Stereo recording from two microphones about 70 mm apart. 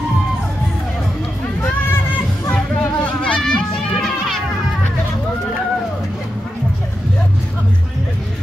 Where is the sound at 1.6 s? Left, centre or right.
Left.